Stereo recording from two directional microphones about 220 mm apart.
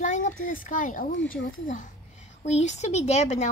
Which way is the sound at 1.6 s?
35° left (ahead or behind).